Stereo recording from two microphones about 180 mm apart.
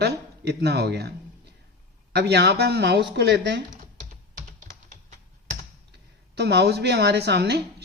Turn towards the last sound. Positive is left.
turn(degrees=-65)  # may be behind; listen again after turning